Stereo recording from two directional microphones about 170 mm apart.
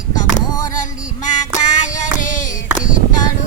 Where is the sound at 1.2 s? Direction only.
45° left (ahead or behind).